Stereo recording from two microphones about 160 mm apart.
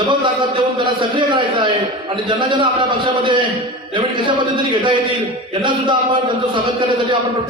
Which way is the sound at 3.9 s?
30° right (ahead or behind).